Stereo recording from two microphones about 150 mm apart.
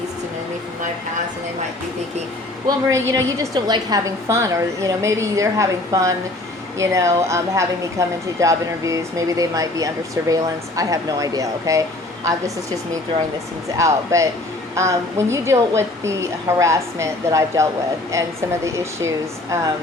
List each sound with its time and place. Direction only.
2.6 s a woman's voice: 20° right (ahead or behind)
13.7 s a woman's voice: 20° right (ahead or behind)